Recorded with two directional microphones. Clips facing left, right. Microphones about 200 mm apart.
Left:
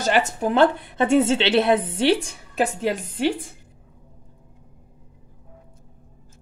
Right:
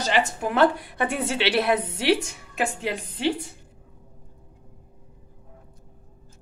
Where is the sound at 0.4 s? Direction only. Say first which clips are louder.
Left 2 dB; 25° left (ahead or behind); by 3.4 s 45° left (ahead or behind).